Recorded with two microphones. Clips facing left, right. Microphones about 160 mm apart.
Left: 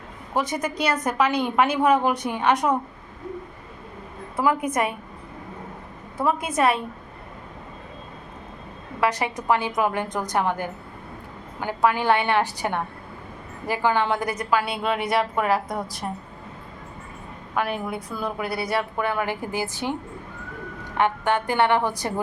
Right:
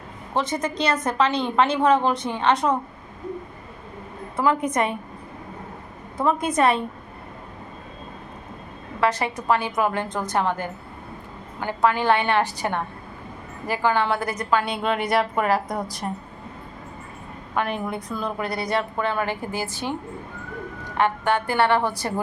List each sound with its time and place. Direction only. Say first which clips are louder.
0.3 s a woman's voice: right 1 dB; 10° left (ahead or behind)
4.4 s a woman's voice: right 1 dB; 10° left (ahead or behind)
6.1 s a woman's voice: right 2 dB; 5° left (ahead or behind)
9.0 s a woman's voice: right 1 dB; 15° left (ahead or behind)
17.5 s a woman's voice: right 1 dB; 5° left (ahead or behind)
21.0 s a woman's voice: even; 15° left (ahead or behind)